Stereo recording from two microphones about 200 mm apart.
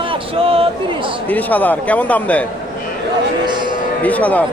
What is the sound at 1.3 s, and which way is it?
Speech, 10° left (ahead or behind).